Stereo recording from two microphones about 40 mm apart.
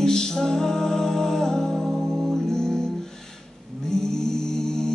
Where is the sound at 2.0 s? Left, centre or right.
Centre.